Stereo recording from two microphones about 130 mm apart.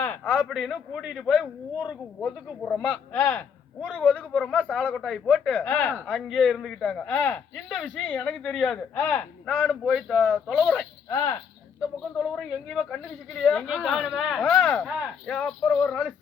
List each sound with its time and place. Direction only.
0.0 s a sound: 15° left (ahead or behind)
0.4 s a man's voice: centre (ahead or behind)
11.1 s speech: 25° left (ahead or behind)
12.3 s a man's voice: 5° left (ahead or behind)
14.5 s speech: 15° left (ahead or behind)